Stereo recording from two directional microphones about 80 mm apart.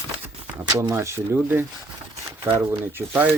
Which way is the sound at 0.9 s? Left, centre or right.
Right.